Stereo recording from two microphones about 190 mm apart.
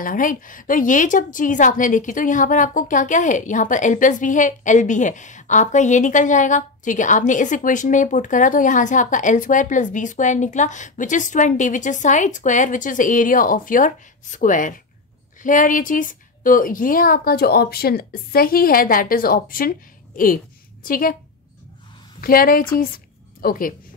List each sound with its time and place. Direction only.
0.0 s a woman's voice: 45° left (ahead or behind)
20.8 s a woman's voice: 50° left (ahead or behind)
22.2 s a woman's voice: 50° left (ahead or behind)